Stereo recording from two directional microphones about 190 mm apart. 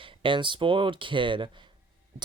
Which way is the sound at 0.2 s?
25° right (ahead or behind).